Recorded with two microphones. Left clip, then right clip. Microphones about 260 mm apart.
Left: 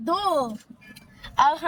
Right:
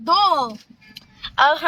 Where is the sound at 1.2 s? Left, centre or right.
Centre.